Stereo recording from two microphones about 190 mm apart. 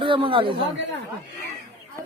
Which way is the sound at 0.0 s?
25° right (ahead or behind).